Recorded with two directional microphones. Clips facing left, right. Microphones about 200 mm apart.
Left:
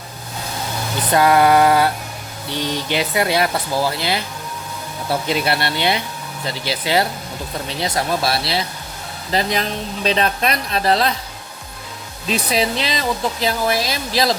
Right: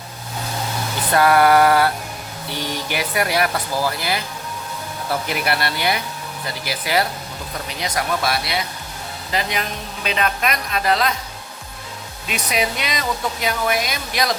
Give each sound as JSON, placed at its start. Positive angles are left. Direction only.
{"t": 1.1, "sound": "speech", "side_deg": 20}
{"t": 5.3, "sound": "a woman's voice", "side_deg": 25}
{"t": 12.3, "sound": "speech", "side_deg": 30}